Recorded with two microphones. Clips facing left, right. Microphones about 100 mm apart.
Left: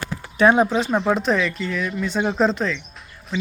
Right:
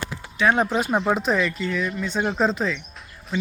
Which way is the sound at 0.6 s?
Centre (ahead or behind).